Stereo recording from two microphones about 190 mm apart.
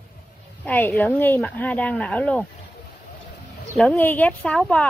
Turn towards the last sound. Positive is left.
turn(degrees=5)  # may be behind; listen again after turning